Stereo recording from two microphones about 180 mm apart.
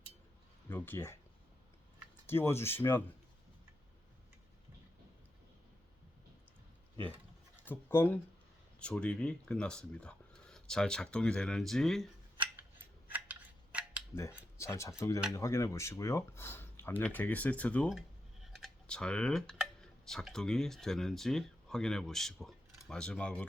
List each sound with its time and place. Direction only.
0.7 s speech: 10° left (ahead or behind)
2.2 s speech: 15° left (ahead or behind)
7.6 s speech: 10° left (ahead or behind)
12.8 s scissors: 10° right (ahead or behind)
14.2 s speech: 15° left (ahead or behind)